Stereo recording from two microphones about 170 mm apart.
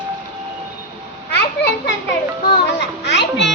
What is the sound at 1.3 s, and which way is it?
Children playing, 90° left.